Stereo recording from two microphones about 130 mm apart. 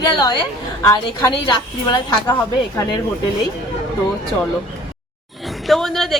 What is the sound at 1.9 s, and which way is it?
Speech, 30° left (ahead or behind).